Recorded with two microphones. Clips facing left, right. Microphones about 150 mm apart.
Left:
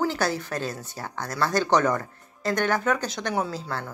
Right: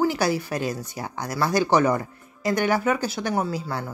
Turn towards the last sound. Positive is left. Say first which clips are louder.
# right 2 dB
turn(degrees=-5)  # may be behind; listen again after turning